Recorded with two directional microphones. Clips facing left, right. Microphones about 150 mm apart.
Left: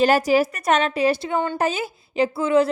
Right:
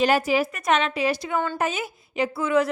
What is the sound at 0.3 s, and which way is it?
Speech, 40° left (ahead or behind).